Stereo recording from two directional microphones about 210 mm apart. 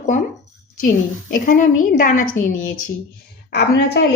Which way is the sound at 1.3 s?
40° left (ahead or behind).